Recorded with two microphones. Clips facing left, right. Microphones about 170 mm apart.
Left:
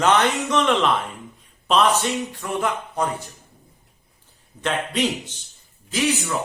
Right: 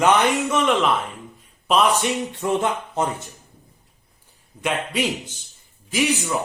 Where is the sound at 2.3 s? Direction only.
25° right (ahead or behind).